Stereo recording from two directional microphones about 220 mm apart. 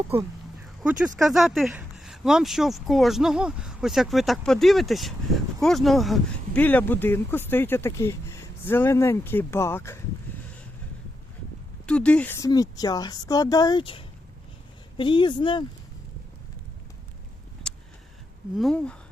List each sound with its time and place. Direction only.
0.8 s speech: centre (ahead or behind)
11.9 s speech: 5° left (ahead or behind); by 15.6 s 20° left (ahead or behind)
17.6 s a sound: centre (ahead or behind)
18.5 s speech: centre (ahead or behind)